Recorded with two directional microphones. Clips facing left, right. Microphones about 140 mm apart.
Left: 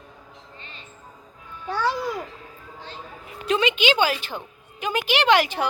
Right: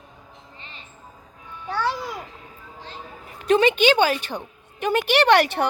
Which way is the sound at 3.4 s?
45° right (ahead or behind).